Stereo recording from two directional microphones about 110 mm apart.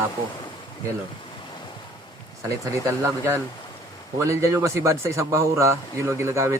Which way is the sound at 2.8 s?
25° right (ahead or behind).